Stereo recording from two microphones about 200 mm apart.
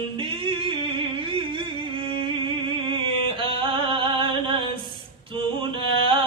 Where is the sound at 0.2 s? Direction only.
25° right (ahead or behind).